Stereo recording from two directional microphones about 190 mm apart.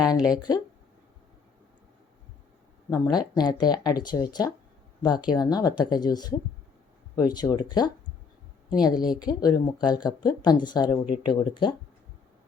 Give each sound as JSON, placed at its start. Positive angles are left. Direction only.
{"t": 0.0, "sound": "speech", "side_deg": 20}
{"t": 2.9, "sound": "speech", "side_deg": 20}